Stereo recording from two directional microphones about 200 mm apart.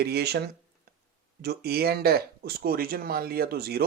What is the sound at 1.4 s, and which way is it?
Speech, 55° right (ahead or behind).